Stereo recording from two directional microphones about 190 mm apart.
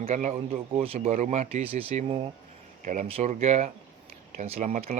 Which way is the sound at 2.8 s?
45° right (ahead or behind).